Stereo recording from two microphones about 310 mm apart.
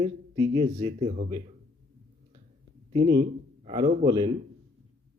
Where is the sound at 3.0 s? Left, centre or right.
Right.